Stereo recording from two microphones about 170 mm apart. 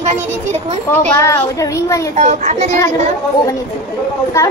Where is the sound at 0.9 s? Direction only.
15° left (ahead or behind).